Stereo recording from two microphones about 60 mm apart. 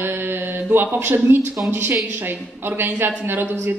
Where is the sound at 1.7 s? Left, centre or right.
Right.